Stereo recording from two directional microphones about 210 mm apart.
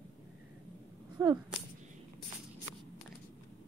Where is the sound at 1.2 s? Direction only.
15° right (ahead or behind).